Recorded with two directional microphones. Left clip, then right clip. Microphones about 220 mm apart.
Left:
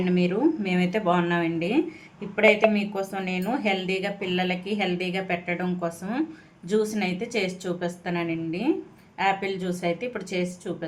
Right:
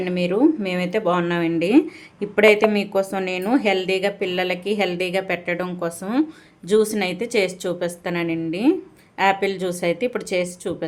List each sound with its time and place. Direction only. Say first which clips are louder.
0.0 s speech: right 5 dB; 30° right (ahead or behind)